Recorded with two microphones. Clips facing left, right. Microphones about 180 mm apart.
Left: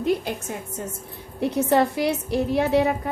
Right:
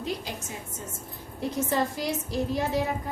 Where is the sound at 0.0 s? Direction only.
55° left (ahead or behind).